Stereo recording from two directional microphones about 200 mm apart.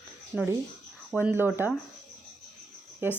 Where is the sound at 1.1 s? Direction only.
5° right (ahead or behind).